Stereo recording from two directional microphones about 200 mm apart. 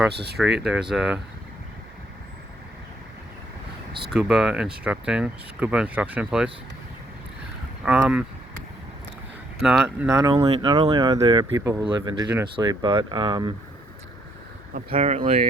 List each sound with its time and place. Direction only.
0.1 s speech: 55° right (ahead or behind)
0.6 s speech: 5° right (ahead or behind)
4.1 s speech: 5° right (ahead or behind)
7.9 s speech: 5° right (ahead or behind)
9.6 s speech: 5° right (ahead or behind); by 13.5 s 20° right (ahead or behind)
14.8 s speech: 30° right (ahead or behind)